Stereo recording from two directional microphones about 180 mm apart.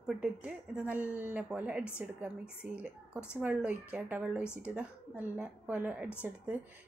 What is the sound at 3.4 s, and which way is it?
A woman's voice, 10° right (ahead or behind).